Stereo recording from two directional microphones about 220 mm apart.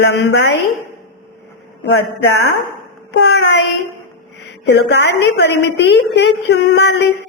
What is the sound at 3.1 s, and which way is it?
Speech, 50° left (ahead or behind).